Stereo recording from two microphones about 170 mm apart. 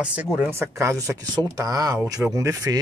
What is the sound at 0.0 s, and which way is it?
Speech, 10° right (ahead or behind).